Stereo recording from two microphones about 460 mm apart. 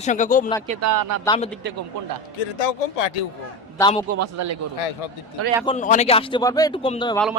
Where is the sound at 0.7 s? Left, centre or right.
Right.